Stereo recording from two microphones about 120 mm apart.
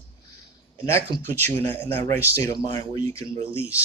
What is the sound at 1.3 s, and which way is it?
Speech, 15° left (ahead or behind).